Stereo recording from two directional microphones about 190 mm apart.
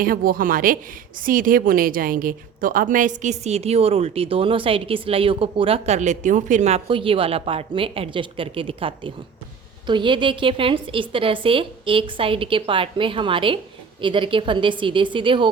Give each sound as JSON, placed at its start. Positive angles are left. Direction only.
{"t": 0.0, "sound": "a woman's voice", "side_deg": -50}